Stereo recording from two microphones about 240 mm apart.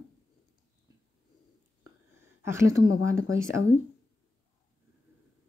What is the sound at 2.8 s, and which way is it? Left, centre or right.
Speech, left.